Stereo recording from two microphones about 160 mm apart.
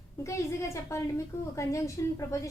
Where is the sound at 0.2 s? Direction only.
20° left (ahead or behind).